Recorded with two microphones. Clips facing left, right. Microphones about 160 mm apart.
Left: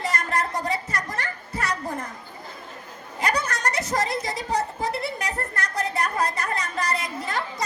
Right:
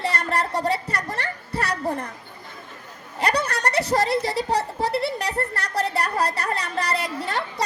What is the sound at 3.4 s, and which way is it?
Speech, 65° right (ahead or behind).